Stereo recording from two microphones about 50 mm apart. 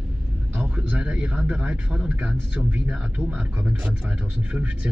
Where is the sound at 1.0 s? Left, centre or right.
Right.